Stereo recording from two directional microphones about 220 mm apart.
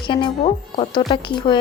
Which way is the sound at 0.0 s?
20° left (ahead or behind).